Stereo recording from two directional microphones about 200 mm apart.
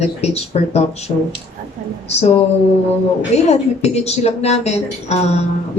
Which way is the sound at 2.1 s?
30° left (ahead or behind).